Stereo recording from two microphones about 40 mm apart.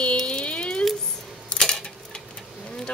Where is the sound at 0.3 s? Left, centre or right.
Left.